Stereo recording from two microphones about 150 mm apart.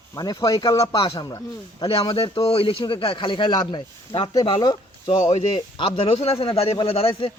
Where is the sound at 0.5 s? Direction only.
35° left (ahead or behind).